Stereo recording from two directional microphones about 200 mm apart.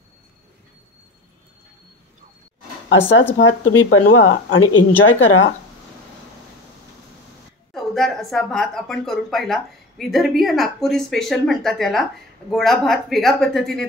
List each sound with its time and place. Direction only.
3.3 s a woman's voice: 80° left
7.7 s a woman's voice: centre (ahead or behind)